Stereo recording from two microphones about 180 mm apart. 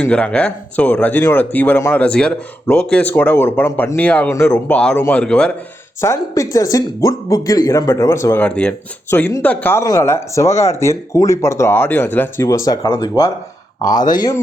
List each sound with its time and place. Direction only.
0.0 s speech: 5° left (ahead or behind)
6.0 s speech: 15° left (ahead or behind)